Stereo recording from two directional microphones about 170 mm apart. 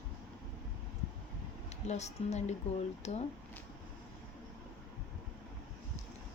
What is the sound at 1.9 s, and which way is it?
Speech, 40° left (ahead or behind).